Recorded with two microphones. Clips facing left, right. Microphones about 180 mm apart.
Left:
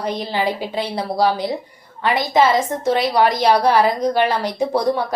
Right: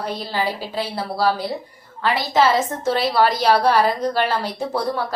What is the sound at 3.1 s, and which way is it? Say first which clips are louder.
A woman's voice: left 1 dB; 15° left (ahead or behind).